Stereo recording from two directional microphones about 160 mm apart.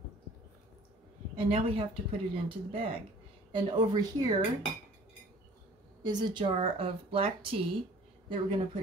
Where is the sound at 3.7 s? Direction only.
25° right (ahead or behind).